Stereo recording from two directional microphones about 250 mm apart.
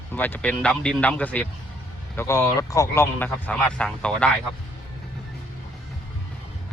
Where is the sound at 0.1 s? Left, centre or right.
Centre.